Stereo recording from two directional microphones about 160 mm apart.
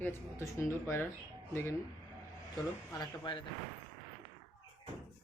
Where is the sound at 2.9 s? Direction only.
25° left (ahead or behind).